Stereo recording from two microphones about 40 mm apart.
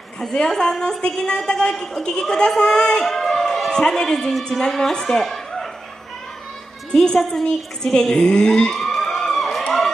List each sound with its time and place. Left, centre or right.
0.2 s a woman's voice: centre
3.1 s a sound: centre
3.7 s a woman's voice: centre
7.2 s a woman's voice: centre
7.4 s a woman's voice: centre
8.7 s police car: centre